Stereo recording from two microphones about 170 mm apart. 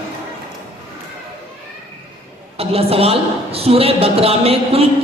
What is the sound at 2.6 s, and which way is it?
A man's voice, 35° right (ahead or behind).